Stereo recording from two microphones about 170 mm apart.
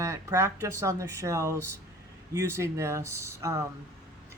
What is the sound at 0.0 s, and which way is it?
Speech, 15° right (ahead or behind).